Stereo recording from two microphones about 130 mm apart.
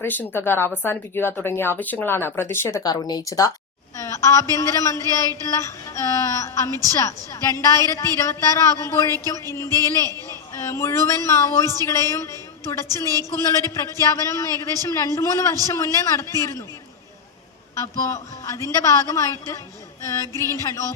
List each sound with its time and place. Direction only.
0.0 s speech: 15° left (ahead or behind)
3.9 s a sound: 25° left (ahead or behind)
4.5 s a woman's voice: 25° left (ahead or behind)
17.7 s a woman's voice: 25° left (ahead or behind)